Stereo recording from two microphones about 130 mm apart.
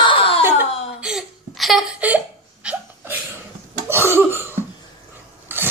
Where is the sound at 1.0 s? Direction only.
Centre (ahead or behind).